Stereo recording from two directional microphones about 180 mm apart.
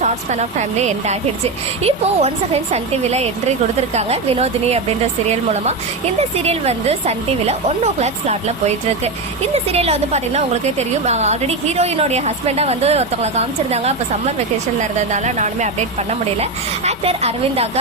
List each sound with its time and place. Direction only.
0.0 s a woman's voice: 40° right (ahead or behind)
9.7 s a woman's voice: 35° right (ahead or behind)